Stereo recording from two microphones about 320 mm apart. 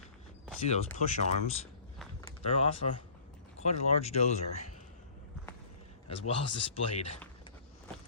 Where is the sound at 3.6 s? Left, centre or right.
Centre.